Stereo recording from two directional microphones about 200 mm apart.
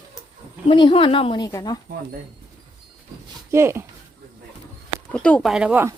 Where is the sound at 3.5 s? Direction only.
15° right (ahead or behind).